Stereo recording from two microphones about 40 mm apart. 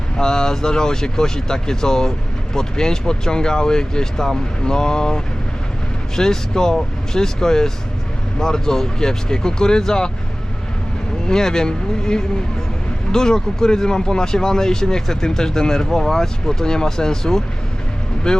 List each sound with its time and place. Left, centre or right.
0.2 s speech: centre
11.3 s speech: centre